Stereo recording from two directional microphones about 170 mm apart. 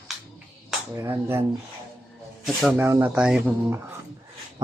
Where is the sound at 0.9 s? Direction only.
15° right (ahead or behind).